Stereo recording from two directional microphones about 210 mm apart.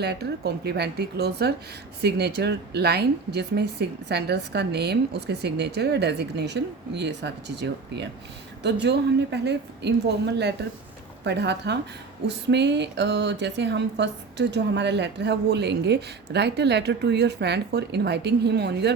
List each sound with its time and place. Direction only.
0.0 s a woman's voice: 50° right (ahead or behind)